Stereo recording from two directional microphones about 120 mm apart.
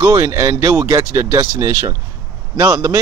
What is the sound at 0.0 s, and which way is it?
Speech, 30° right (ahead or behind).